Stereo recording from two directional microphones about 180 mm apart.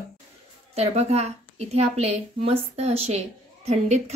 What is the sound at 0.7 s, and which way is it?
A woman's voice, 35° right (ahead or behind).